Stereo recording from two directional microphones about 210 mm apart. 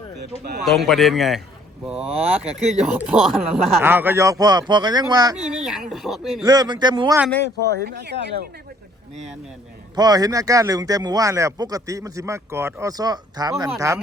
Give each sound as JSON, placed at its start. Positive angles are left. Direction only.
{"t": 0.6, "sound": "speech", "side_deg": 0}
{"t": 5.5, "sound": "speech", "side_deg": 0}
{"t": 6.4, "sound": "speech", "side_deg": -20}
{"t": 7.6, "sound": "speech", "side_deg": -50}
{"t": 9.9, "sound": "speech", "side_deg": -20}